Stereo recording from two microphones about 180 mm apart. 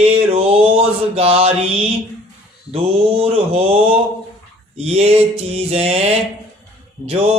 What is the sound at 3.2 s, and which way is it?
Mantra, 30° right (ahead or behind).